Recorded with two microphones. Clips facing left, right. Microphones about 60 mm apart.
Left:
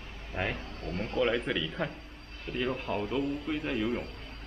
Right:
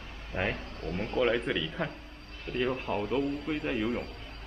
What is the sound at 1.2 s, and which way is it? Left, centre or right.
Speech, centre.